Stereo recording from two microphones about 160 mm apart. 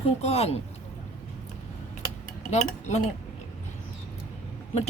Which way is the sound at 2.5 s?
45° left (ahead or behind).